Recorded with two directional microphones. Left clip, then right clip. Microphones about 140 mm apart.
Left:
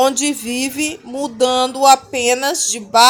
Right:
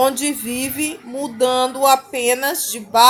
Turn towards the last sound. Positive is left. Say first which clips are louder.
# left 2 dB
turn(degrees=50)  # may be behind; listen again after turning